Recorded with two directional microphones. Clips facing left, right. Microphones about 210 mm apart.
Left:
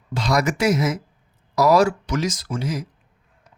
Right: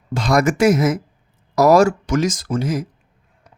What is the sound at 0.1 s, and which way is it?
Speech, 50° right (ahead or behind).